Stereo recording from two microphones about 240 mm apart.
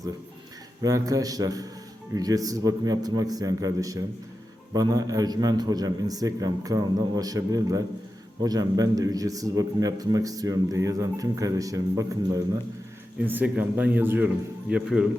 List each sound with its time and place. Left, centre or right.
0.8 s a man's voice: centre